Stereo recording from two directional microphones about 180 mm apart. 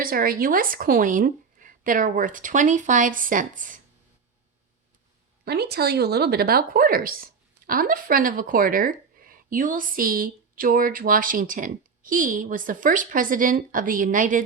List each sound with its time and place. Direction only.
0.0 s speech: 55° right (ahead or behind)
5.5 s speech: 65° right (ahead or behind); by 14.4 s 45° right (ahead or behind)